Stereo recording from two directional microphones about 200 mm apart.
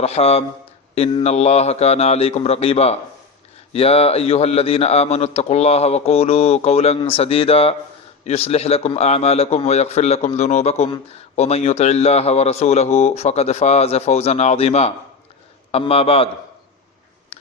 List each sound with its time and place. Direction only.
0.0 s a man's voice: 30° left (ahead or behind)